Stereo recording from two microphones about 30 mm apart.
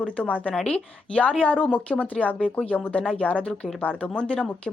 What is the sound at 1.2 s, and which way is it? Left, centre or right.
A woman's voice, left.